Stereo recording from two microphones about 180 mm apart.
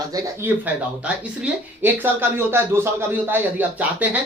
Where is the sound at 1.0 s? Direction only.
10° right (ahead or behind).